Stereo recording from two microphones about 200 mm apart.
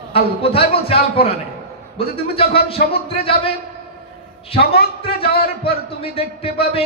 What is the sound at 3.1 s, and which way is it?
Speech, 30° left (ahead or behind).